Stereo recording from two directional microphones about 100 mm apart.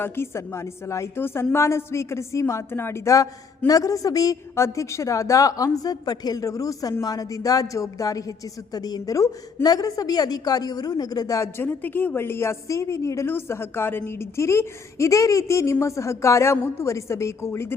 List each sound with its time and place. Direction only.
0.0 s a woman's voice: 25° left (ahead or behind)
11.5 s a woman's voice: 20° left (ahead or behind)